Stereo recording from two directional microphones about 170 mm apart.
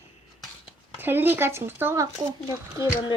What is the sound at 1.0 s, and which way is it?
Speech, 10° right (ahead or behind).